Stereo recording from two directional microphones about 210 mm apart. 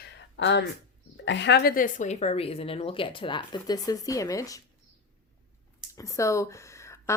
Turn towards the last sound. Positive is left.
turn(degrees=15)  # may be behind; listen again after turning